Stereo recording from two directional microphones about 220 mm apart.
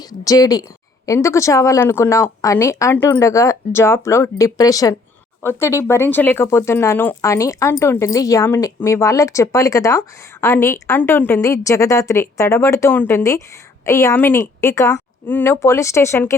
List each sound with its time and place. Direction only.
0.1 s speech: 15° left (ahead or behind)